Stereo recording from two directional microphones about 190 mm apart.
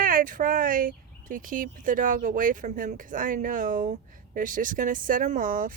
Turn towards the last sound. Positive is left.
turn(degrees=-45)  # may be behind; listen again after turning